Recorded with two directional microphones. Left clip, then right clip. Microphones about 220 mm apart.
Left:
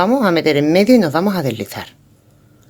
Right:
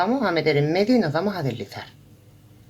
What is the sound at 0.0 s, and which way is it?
Speech, 45° left (ahead or behind).